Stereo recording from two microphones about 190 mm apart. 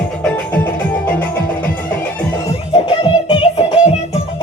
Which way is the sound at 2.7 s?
25° left (ahead or behind).